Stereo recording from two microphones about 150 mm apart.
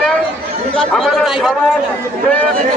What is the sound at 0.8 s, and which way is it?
Speech, centre (ahead or behind).